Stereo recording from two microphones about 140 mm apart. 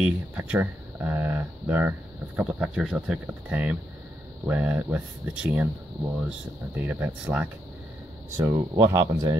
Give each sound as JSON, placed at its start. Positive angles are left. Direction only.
{"t": 0.0, "sound": "speech", "side_deg": -10}
{"t": 8.7, "sound": "speech", "side_deg": -25}